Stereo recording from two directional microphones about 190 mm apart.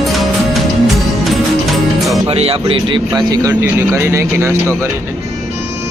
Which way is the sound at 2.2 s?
30° right (ahead or behind).